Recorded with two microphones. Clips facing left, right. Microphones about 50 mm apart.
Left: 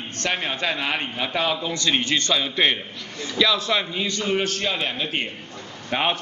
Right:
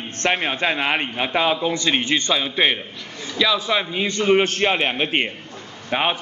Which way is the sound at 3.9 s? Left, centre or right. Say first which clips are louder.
Right 6 dB; right.